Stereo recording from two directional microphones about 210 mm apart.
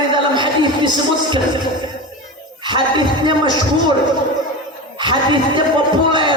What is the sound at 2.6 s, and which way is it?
Speech, 20° right (ahead or behind).